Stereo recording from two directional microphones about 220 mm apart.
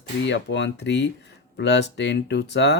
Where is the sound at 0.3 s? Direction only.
55° left (ahead or behind).